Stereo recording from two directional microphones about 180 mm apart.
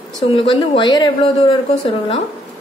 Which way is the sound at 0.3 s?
30° left (ahead or behind).